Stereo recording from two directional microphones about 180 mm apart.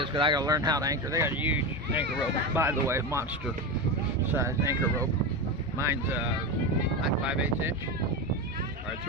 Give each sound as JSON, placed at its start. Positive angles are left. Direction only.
{"t": 0.0, "sound": "speech", "side_deg": -25}
{"t": 2.6, "sound": "speech", "side_deg": -15}
{"t": 4.3, "sound": "speech", "side_deg": -15}